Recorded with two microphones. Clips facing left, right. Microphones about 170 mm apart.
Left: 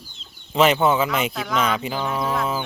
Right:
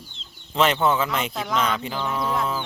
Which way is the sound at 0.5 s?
10° left (ahead or behind).